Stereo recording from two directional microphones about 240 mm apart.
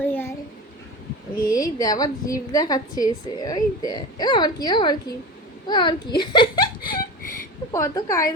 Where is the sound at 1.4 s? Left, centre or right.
Centre.